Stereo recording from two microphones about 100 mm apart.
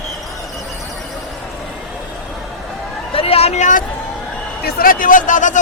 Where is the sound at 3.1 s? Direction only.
75° left (ahead or behind).